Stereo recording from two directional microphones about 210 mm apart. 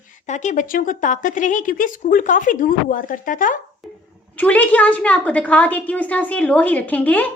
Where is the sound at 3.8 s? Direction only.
Centre (ahead or behind).